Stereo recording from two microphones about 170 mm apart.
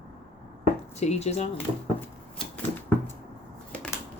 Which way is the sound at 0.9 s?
40° left (ahead or behind).